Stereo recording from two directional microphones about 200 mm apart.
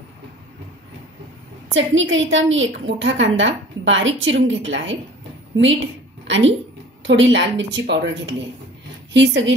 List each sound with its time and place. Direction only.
1.7 s a woman's voice: 70° right (ahead or behind)
6.2 s a sound: 65° right (ahead or behind)
7.1 s a woman's voice: 65° right (ahead or behind)